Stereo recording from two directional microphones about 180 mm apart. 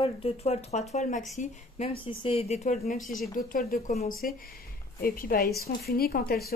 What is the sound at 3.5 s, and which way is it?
Speech, 50° left (ahead or behind).